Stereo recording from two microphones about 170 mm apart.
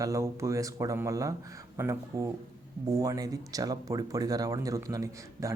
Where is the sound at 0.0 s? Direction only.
20° right (ahead or behind).